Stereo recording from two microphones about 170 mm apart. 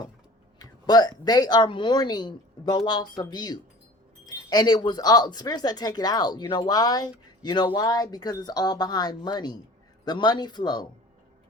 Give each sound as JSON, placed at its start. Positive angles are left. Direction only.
{"t": 0.6, "sound": "speech", "side_deg": 25}